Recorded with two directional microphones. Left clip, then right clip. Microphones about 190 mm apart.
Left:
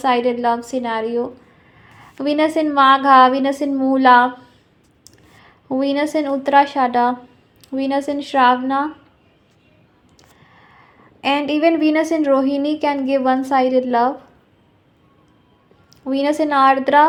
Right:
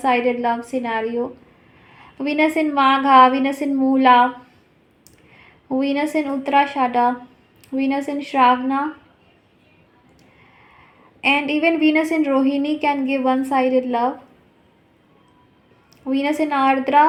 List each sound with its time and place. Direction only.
0.0 s a woman's voice: 10° left (ahead or behind)
11.2 s a woman's voice: 15° left (ahead or behind)
16.0 s a woman's voice: 15° left (ahead or behind)